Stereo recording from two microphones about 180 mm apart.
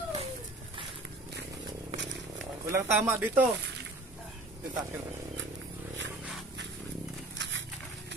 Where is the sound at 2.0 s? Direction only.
90° right.